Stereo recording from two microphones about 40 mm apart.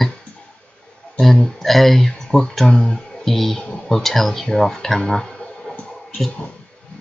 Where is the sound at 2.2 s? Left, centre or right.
Centre.